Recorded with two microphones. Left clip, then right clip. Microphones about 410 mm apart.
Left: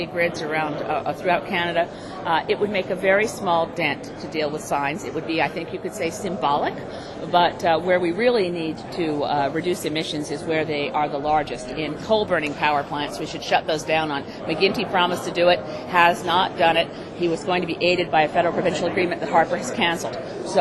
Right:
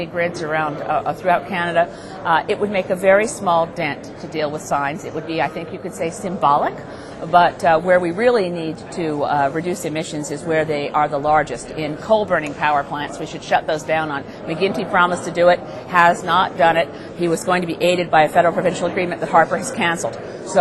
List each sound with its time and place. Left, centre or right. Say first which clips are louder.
0.0 s a woman's voice: right 2 dB; right